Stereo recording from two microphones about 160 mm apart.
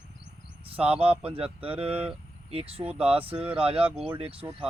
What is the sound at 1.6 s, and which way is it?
Speech, 35° right (ahead or behind).